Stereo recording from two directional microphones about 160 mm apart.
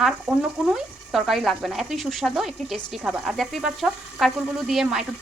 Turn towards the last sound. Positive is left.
turn(degrees=-5)  # may be behind; listen again after turning